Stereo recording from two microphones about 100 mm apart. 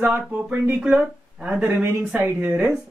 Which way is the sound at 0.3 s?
15° right (ahead or behind).